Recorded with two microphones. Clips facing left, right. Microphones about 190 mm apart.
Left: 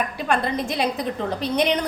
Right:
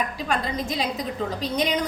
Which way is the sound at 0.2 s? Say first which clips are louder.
Left 4 dB; 60° left (ahead or behind).